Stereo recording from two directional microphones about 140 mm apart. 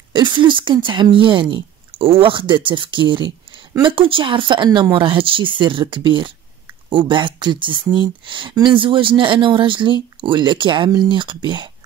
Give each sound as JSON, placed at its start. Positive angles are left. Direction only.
{"t": 0.1, "sound": "speech", "side_deg": -35}